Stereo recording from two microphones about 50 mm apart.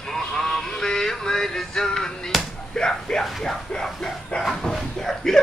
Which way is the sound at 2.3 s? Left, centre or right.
Centre.